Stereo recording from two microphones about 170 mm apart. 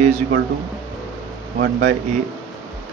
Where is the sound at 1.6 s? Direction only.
60° right (ahead or behind).